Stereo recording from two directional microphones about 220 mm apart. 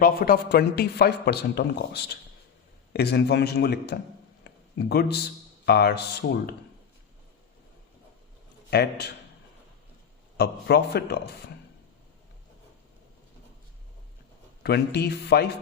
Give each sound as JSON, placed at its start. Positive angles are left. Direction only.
{"t": 0.0, "sound": "speech", "side_deg": 45}
{"t": 8.7, "sound": "speech", "side_deg": 50}
{"t": 10.3, "sound": "speech", "side_deg": 45}
{"t": 14.6, "sound": "speech", "side_deg": 50}